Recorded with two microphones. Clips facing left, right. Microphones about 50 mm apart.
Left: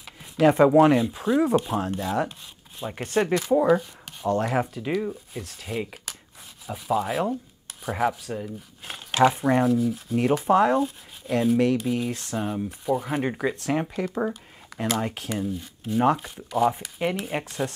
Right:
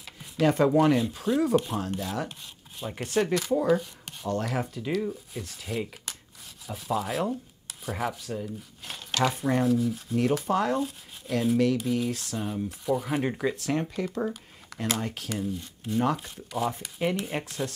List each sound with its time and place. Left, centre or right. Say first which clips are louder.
0.2 s speech: left 5 dB; centre
5.4 s speech: left 2 dB; centre
8.4 s speech: left 1 dB; left
9.7 s speech: left 2 dB; centre
10.1 s speech: left 5 dB; centre
16.4 s speech: left 7 dB; centre